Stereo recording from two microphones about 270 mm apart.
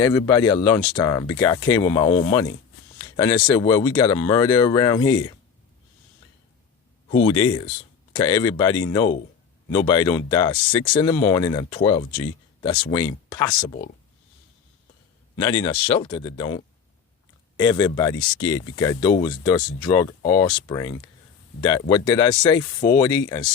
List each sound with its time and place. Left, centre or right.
0.0 s speech: centre
7.1 s speech: centre
15.4 s speech: centre